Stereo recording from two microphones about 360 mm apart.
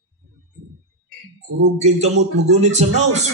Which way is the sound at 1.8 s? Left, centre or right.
Centre.